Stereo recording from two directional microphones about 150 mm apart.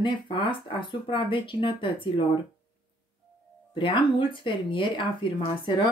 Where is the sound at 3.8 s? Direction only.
35° left (ahead or behind).